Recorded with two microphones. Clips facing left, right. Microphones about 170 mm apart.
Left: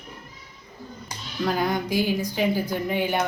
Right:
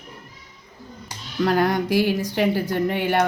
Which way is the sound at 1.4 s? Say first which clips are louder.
Right 4 dB; 70° right (ahead or behind).